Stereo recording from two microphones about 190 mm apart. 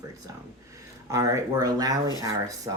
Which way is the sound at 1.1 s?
15° right (ahead or behind).